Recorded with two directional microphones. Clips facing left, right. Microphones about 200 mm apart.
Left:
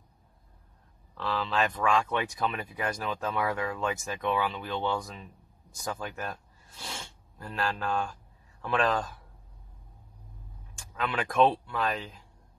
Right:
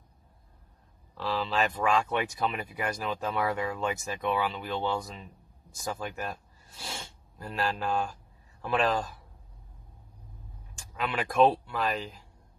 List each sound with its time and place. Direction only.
1.4 s speech: 5° right (ahead or behind)
10.8 s speech: centre (ahead or behind)